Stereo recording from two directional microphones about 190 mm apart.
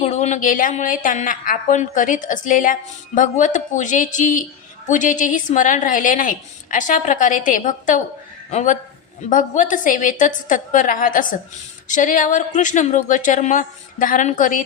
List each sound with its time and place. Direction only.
0.0 s a woman's voice: 35° left (ahead or behind)